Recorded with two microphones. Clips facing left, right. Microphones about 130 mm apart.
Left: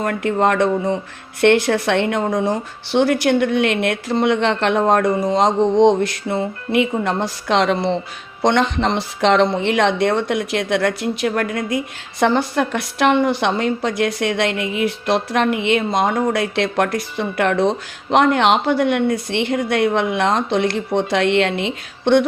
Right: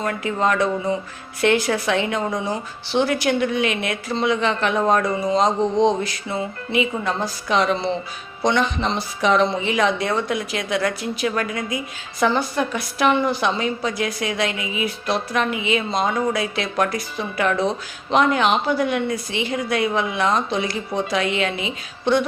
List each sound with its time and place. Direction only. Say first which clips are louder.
0.0 s speech: left 4 dB; 60° left (ahead or behind)
5.5 s a sound: left 4 dB; 20° left (ahead or behind)
5.8 s a woman's voice: left 5 dB; 65° left (ahead or behind)
12.2 s a woman's voice: left 3 dB; 70° left (ahead or behind)